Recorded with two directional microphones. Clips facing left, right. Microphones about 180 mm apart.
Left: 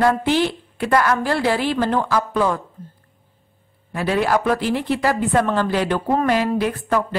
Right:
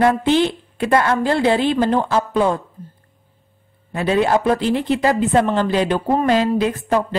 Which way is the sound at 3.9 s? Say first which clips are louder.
Right 2 dB; 25° right (ahead or behind).